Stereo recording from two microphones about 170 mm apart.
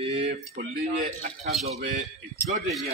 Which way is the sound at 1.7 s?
40° right (ahead or behind).